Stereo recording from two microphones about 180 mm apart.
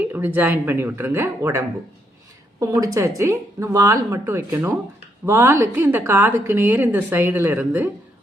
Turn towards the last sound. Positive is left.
turn(degrees=-10)  # may be behind; listen again after turning